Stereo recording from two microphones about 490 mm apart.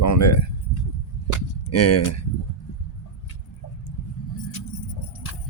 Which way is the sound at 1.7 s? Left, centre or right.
Left.